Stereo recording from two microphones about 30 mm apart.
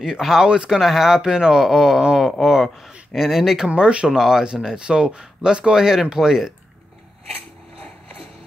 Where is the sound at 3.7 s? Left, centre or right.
Right.